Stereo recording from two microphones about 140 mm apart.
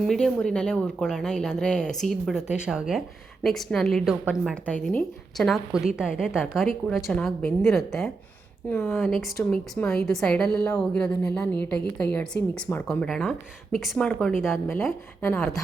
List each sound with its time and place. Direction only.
0.0 s a woman's voice: 5° left (ahead or behind)
4.6 s a woman's voice: 10° left (ahead or behind)
6.8 s a woman's voice: 10° left (ahead or behind)
12.6 s speech: 20° left (ahead or behind)
13.1 s a woman's voice: centre (ahead or behind)
15.2 s a woman's voice: 15° left (ahead or behind)